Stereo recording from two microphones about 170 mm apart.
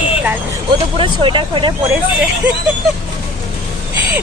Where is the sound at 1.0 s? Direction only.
30° right (ahead or behind).